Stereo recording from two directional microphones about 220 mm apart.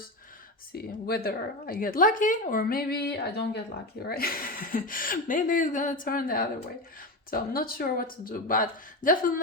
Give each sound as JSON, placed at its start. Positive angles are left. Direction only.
{"t": 0.7, "sound": "speech", "side_deg": 45}